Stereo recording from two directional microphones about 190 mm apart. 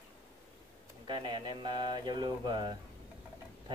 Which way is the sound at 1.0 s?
25° right (ahead or behind).